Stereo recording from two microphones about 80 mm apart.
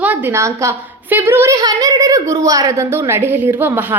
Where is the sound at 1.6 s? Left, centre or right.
Right.